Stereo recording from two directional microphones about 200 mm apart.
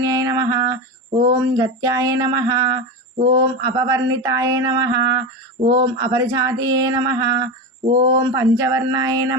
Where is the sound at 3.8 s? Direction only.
20° right (ahead or behind).